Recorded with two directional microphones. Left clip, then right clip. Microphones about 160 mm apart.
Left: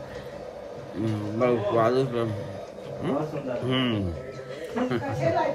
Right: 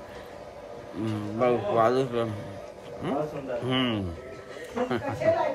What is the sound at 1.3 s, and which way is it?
A man's voice, 15° right (ahead or behind).